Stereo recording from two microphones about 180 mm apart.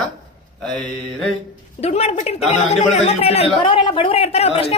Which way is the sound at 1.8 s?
35° left (ahead or behind).